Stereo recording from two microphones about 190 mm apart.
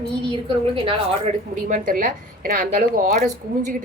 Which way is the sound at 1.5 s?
45° right (ahead or behind).